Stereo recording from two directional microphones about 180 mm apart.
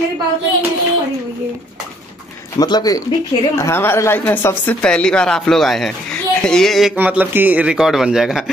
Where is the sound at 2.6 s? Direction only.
20° left (ahead or behind).